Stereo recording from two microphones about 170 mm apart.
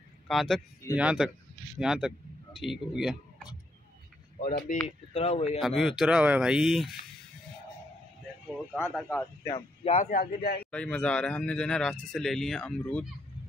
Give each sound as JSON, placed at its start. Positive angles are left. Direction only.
{"t": 0.3, "sound": "a man's voice", "side_deg": 0}
{"t": 4.4, "sound": "speech", "side_deg": 55}
{"t": 4.8, "sound": "speech", "side_deg": 40}
{"t": 5.6, "sound": "a man's voice", "side_deg": 0}
{"t": 8.5, "sound": "a man's voice", "side_deg": -5}
{"t": 9.1, "sound": "a man's voice", "side_deg": 15}
{"t": 9.9, "sound": "a man's voice", "side_deg": 60}
{"t": 10.7, "sound": "a man's voice", "side_deg": 5}